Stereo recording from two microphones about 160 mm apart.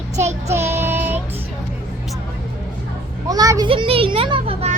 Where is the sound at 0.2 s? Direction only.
45° right (ahead or behind).